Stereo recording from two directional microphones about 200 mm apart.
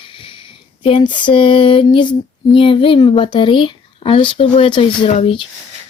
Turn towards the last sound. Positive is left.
turn(degrees=30)  # may be behind; listen again after turning